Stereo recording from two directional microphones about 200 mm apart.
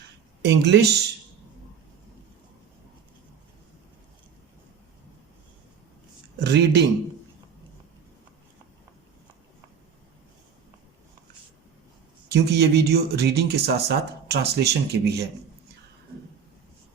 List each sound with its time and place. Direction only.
0.6 s speech: 55° right (ahead or behind)
6.4 s speech: 55° right (ahead or behind)
12.3 s speech: 55° right (ahead or behind)